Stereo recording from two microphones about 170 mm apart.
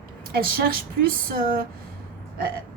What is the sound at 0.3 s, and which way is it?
A woman's voice, 60° right (ahead or behind).